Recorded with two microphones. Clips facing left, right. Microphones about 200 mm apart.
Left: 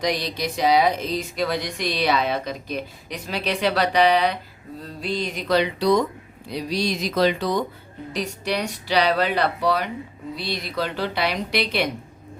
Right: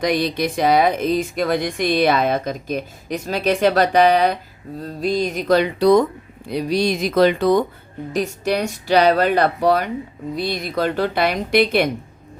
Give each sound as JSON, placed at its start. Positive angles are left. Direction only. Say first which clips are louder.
{"t": 0.0, "sound": "speech", "louder": "right 5 dB", "side_deg": -55}